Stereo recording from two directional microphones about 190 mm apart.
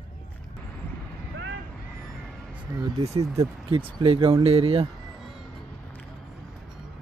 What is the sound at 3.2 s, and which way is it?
Speech, 20° right (ahead or behind).